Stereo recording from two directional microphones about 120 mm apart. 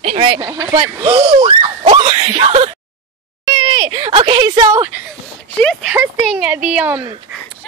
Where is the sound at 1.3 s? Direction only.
55° right (ahead or behind).